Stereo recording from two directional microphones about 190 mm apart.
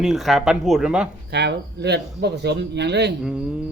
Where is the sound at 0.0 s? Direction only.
Centre (ahead or behind).